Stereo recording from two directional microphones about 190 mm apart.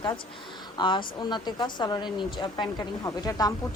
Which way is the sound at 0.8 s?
25° left (ahead or behind).